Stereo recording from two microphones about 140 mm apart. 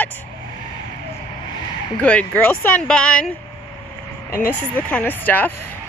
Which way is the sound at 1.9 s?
10° left (ahead or behind).